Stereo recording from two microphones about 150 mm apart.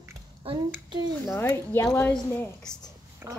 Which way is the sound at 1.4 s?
20° left (ahead or behind).